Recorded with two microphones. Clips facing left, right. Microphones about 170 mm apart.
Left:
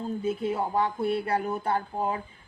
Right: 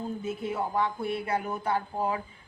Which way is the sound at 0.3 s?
30° left (ahead or behind).